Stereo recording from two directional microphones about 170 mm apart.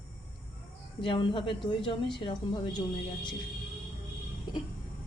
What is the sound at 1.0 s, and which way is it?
Speech, 30° left (ahead or behind).